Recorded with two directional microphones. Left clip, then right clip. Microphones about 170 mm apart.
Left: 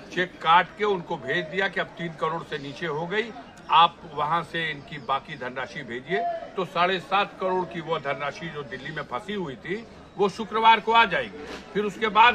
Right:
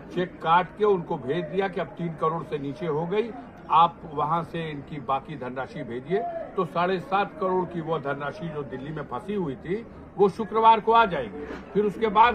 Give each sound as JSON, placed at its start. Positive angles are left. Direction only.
{"t": 0.2, "sound": "a man's voice", "side_deg": 30}